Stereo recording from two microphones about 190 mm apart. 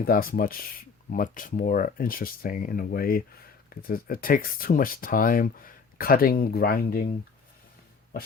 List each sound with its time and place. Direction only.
0.0 s speech: 50° left (ahead or behind)